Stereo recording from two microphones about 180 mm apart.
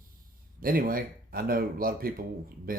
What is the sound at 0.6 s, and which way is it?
Speech, 55° right (ahead or behind).